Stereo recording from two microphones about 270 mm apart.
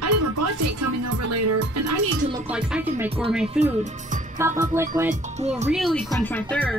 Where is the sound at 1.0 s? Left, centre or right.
Right.